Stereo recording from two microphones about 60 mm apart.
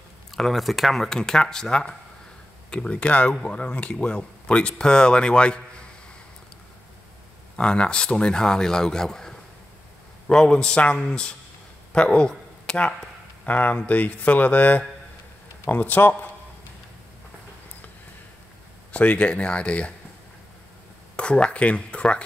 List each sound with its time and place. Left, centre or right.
0.3 s speech: centre
7.5 s speech: centre
13.5 s a man's voice: left
18.9 s speech: left
21.2 s speech: centre